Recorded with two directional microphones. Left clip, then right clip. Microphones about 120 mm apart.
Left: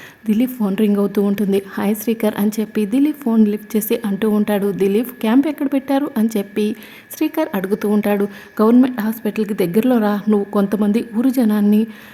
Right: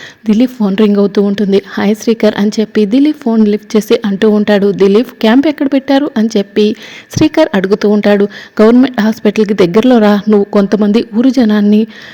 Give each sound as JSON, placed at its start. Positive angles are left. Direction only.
{"t": 0.3, "sound": "a woman's voice", "side_deg": -30}
{"t": 0.7, "sound": "speech", "side_deg": -40}
{"t": 1.0, "sound": "speech", "side_deg": -30}
{"t": 4.6, "sound": "a woman's voice", "side_deg": -25}
{"t": 4.9, "sound": "a woman's voice", "side_deg": -35}